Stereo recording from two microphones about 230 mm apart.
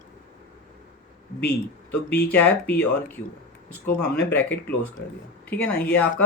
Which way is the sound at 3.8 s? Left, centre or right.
Left.